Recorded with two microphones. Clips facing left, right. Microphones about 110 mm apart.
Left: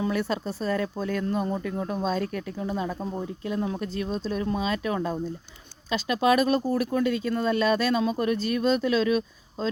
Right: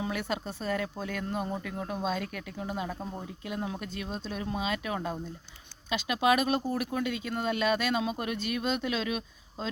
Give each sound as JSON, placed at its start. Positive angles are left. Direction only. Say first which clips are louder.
{"t": 0.0, "sound": "speech", "louder": "left 6 dB", "side_deg": 35}